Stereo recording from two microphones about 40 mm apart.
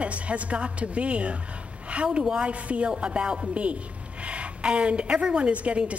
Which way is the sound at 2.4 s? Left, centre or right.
Right.